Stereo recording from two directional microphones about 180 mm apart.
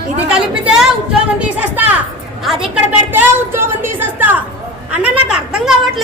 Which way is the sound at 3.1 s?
10° right (ahead or behind).